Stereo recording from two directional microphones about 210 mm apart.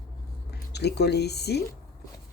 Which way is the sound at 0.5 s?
50° left (ahead or behind).